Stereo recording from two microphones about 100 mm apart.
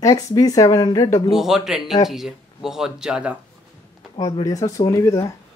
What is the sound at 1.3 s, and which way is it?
Speech, 5° right (ahead or behind).